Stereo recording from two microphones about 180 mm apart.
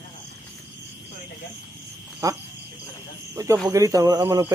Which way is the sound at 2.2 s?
15° right (ahead or behind).